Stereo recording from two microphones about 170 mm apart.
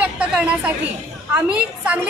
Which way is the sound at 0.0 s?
5° right (ahead or behind).